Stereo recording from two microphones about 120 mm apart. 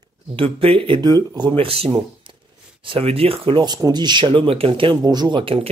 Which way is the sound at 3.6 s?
35° right (ahead or behind).